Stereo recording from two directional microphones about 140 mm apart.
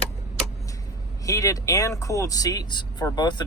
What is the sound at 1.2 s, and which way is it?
Speech, 25° left (ahead or behind).